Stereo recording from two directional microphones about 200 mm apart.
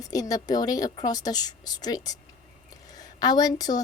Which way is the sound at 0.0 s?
20° left (ahead or behind).